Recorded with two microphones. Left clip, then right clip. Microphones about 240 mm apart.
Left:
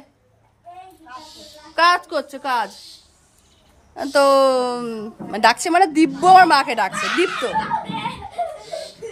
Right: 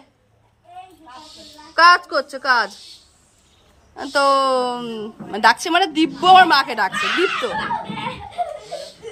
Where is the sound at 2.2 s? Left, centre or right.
Left.